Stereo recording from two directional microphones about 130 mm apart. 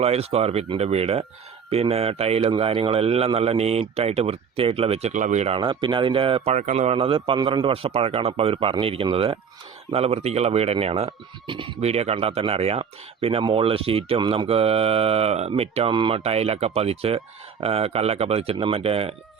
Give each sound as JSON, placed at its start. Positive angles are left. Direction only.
{"t": 0.0, "sound": "speech", "side_deg": -50}
{"t": 5.1, "sound": "speech", "side_deg": -70}
{"t": 5.5, "sound": "speech", "side_deg": -40}
{"t": 11.8, "sound": "speech", "side_deg": -55}